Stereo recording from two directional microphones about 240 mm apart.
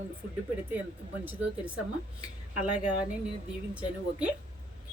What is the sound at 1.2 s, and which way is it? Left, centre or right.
Speech, centre.